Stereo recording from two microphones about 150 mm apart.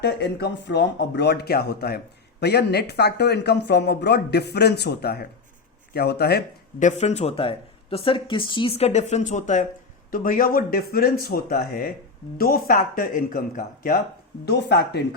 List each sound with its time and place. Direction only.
0.0 s speech: 90° left
6.8 s speech: 50° left (ahead or behind)
10.1 s speech: 65° left (ahead or behind)